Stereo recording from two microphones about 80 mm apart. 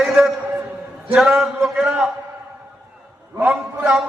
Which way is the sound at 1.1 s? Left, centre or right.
Centre.